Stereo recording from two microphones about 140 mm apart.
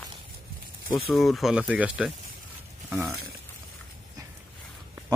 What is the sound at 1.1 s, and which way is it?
Speech, centre (ahead or behind).